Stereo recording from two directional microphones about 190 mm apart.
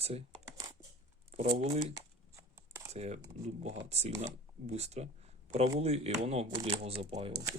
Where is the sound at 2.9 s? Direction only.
35° right (ahead or behind).